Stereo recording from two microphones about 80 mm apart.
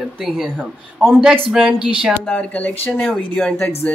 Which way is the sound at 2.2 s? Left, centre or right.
Centre.